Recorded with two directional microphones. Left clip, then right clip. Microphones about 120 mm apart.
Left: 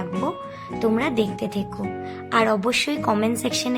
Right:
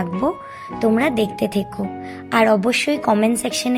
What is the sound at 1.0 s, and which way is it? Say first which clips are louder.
Speech: right 4 dB; 35° right (ahead or behind).